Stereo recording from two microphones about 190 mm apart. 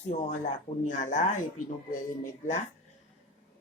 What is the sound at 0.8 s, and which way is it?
Speech, 40° left (ahead or behind).